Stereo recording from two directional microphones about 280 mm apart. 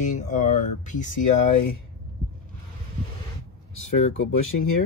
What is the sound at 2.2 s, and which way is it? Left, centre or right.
Boat, right.